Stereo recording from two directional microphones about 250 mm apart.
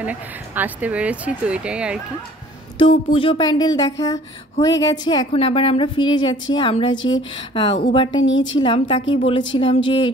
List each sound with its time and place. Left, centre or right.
0.0 s speech: centre
2.8 s a woman's voice: left
8.2 s a woman's voice: left
8.5 s a woman's voice: centre